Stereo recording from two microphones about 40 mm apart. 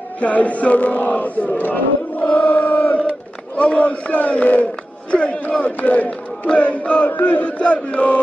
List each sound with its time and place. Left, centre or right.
0.2 s chant: left
1.6 s speech: left
2.2 s chant: left